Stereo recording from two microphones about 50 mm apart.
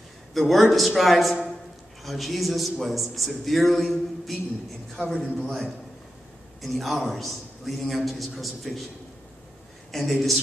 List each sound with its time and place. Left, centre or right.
0.3 s a man's voice: centre
9.8 s speech: centre